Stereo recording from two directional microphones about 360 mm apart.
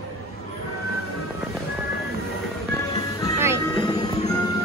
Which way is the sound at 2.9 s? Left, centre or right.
Centre.